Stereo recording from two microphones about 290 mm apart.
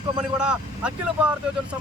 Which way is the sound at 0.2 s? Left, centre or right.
Centre.